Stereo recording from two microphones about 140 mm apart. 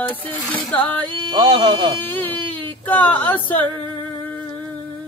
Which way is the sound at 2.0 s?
15° left (ahead or behind).